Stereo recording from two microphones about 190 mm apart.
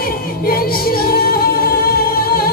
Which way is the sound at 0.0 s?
50° left (ahead or behind).